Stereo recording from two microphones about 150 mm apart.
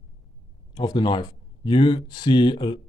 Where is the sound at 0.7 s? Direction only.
30° left (ahead or behind).